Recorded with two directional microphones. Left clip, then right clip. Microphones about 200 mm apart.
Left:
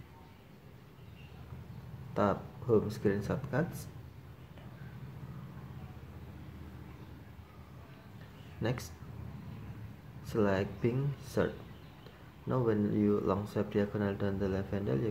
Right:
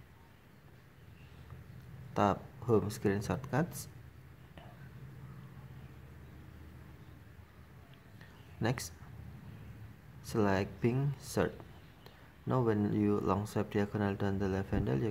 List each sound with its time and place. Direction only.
2.1 s speech: 25° right (ahead or behind)
8.6 s speech: 25° right (ahead or behind)
10.2 s speech: 25° right (ahead or behind)